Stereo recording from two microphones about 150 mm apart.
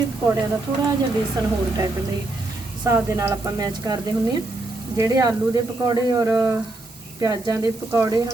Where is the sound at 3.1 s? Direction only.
20° right (ahead or behind).